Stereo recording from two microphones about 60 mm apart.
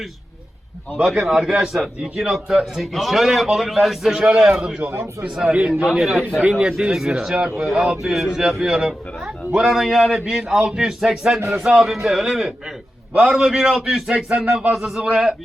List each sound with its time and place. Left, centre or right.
0.9 s a man's voice: centre
4.1 s a man's voice: centre
4.4 s a man's voice: centre
4.8 s a man's voice: right
5.8 s a man's voice: centre
8.0 s a man's voice: centre
11.3 s speech: right
11.6 s a man's voice: centre
14.7 s a man's voice: centre